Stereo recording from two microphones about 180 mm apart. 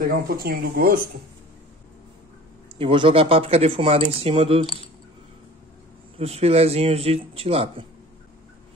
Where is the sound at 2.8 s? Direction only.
30° right (ahead or behind).